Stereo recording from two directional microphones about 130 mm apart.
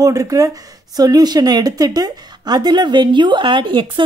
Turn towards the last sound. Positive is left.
turn(degrees=-40)  # may be behind; listen again after turning